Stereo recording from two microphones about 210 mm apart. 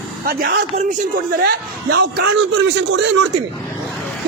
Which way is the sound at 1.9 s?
50° right (ahead or behind).